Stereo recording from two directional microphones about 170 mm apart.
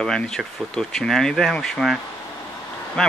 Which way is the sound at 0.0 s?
5° left (ahead or behind).